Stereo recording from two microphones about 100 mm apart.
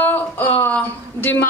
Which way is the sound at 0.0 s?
20° left (ahead or behind).